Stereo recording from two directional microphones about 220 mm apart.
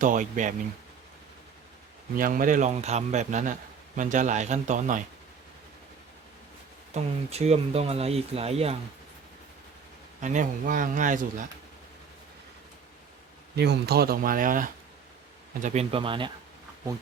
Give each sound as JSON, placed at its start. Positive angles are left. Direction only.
{"t": 0.0, "sound": "a man's voice", "side_deg": -35}
{"t": 2.1, "sound": "a man's voice", "side_deg": -40}
{"t": 6.9, "sound": "speech", "side_deg": -30}
{"t": 10.2, "sound": "a man's voice", "side_deg": -35}
{"t": 13.6, "sound": "a man's voice", "side_deg": -50}